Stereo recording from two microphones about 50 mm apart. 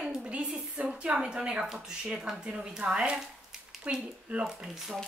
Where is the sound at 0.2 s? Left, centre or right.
Right.